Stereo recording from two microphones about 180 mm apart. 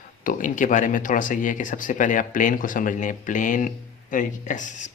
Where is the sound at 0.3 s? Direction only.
45° left (ahead or behind).